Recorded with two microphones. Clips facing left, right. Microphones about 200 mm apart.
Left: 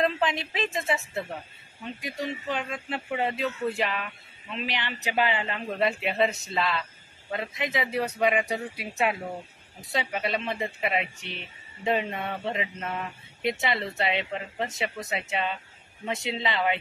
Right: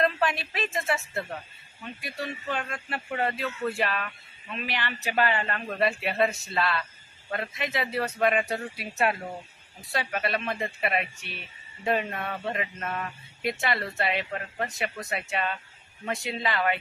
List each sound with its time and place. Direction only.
0.0 s a man's voice: 20° left (ahead or behind)